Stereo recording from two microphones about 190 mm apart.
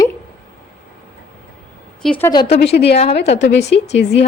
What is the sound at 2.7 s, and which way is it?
Speech, 45° left (ahead or behind).